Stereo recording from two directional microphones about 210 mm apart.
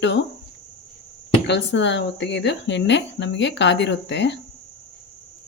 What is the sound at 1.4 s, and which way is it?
Speech, 55° left (ahead or behind).